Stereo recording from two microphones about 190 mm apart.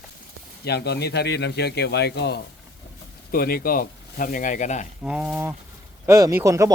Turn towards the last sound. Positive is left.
turn(degrees=-15)  # may be behind; listen again after turning